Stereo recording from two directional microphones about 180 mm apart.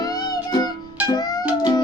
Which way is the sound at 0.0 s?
20° left (ahead or behind).